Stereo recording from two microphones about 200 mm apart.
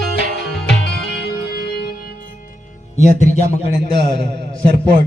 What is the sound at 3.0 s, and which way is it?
Speech, 35° left (ahead or behind).